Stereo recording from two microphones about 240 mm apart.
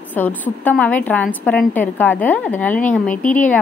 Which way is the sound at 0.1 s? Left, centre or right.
Centre.